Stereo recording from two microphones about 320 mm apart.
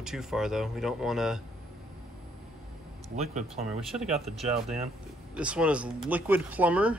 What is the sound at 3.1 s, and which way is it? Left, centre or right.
Speech, right.